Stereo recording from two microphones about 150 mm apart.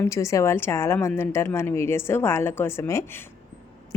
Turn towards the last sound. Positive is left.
turn(degrees=15)  # may be behind; listen again after turning